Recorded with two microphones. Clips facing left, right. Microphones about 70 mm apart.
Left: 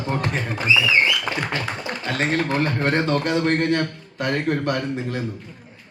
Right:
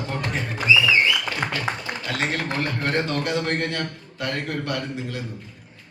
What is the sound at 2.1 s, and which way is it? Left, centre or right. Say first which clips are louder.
A man's voice: left 5 dB; left.